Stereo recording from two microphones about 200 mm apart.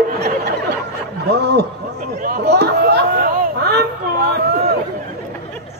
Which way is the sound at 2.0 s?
50° right (ahead or behind).